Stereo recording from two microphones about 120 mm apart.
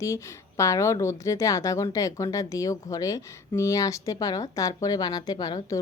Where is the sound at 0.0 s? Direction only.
25° left (ahead or behind).